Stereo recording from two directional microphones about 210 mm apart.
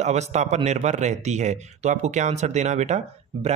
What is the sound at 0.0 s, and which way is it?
Speech, 35° right (ahead or behind).